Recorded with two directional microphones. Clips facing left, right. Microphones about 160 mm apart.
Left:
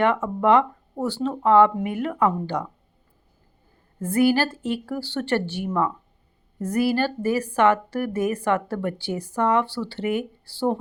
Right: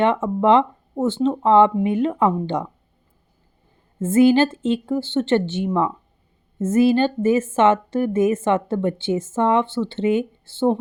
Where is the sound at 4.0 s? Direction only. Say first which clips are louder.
Right 5 dB; 20° right (ahead or behind).